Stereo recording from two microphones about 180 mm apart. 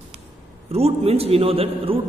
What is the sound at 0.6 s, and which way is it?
A man's voice, 35° right (ahead or behind).